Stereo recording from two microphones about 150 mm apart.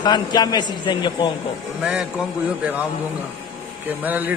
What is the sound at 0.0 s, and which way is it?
A man's voice, 30° left (ahead or behind).